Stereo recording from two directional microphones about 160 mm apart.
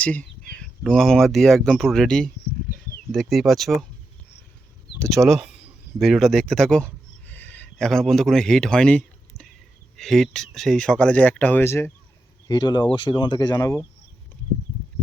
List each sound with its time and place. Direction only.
0.0 s speech: 10° left (ahead or behind)
4.9 s speech: centre (ahead or behind)
12.5 s speech: 25° left (ahead or behind)